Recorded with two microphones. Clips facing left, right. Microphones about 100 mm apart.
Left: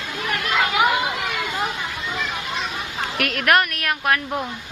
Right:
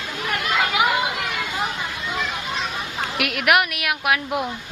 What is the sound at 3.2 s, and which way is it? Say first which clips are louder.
A woman's voice: even; 5° right (ahead or behind).